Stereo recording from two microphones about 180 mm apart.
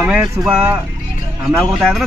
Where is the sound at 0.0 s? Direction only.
5° right (ahead or behind).